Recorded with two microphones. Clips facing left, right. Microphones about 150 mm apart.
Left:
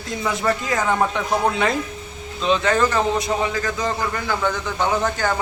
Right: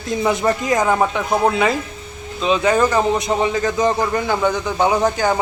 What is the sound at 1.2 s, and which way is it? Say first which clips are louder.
Speech: right 2 dB; 5° right (ahead or behind).